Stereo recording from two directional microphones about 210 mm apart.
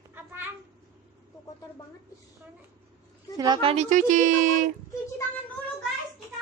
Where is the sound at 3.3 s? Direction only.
20° right (ahead or behind); by 4.6 s 40° right (ahead or behind).